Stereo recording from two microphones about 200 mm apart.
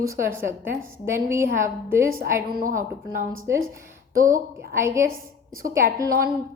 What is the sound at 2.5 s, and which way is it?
Speech, 45° right (ahead or behind).